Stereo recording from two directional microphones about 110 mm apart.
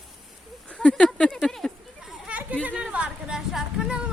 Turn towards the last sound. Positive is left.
turn(degrees=-5)  # may be behind; listen again after turning